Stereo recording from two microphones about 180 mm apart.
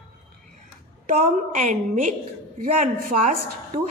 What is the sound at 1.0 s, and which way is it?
A woman's voice, 45° right (ahead or behind).